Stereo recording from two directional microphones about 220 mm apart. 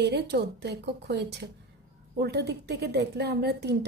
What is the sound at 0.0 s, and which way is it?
A woman's voice, 50° right (ahead or behind).